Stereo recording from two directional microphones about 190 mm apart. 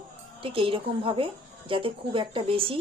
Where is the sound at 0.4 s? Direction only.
30° right (ahead or behind).